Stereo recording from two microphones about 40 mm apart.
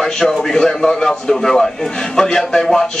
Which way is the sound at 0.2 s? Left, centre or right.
Centre.